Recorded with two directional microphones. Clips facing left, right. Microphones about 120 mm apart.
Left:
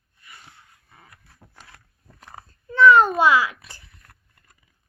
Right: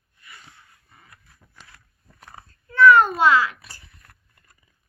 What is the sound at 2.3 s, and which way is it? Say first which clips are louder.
A child's voice: even; 20° left (ahead or behind).